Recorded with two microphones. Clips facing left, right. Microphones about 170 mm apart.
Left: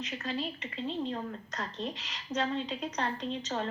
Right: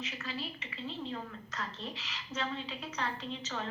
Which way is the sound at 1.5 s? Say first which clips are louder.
Left 3 dB; 40° left (ahead or behind).